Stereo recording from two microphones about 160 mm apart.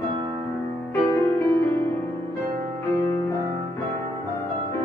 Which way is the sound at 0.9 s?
15° left (ahead or behind).